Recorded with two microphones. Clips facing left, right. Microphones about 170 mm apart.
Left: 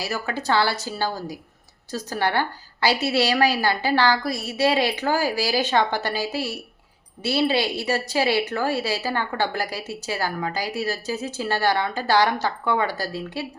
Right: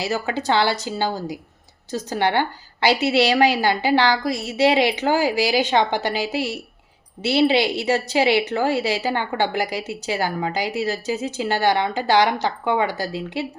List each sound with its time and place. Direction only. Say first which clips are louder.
0.0 s a woman's voice: right 4 dB; 25° right (ahead or behind)